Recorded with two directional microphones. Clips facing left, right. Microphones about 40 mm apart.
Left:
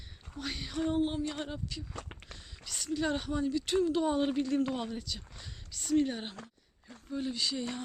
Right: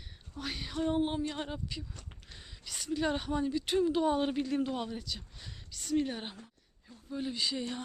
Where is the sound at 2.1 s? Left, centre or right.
Left.